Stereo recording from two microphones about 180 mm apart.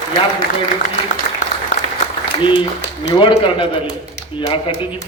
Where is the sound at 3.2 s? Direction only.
30° left (ahead or behind).